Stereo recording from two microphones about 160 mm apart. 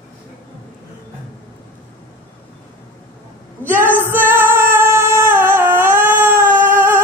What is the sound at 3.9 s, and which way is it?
Music, 15° right (ahead or behind).